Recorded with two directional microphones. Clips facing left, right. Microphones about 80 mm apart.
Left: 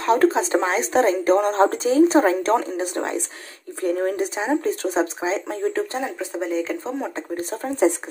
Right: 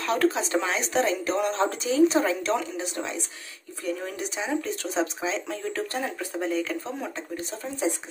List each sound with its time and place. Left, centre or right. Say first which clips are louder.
0.0 s speech: left 6 dB; left
6.0 s speech: left 3 dB; centre
7.2 s speech: left 6 dB; left
7.6 s speech: left 9 dB; left